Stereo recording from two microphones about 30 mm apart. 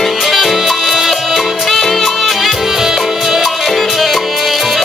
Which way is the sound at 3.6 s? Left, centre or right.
Centre.